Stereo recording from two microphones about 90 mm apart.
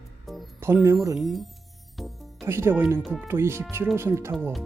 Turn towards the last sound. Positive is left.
turn(degrees=-30)  # may be behind; listen again after turning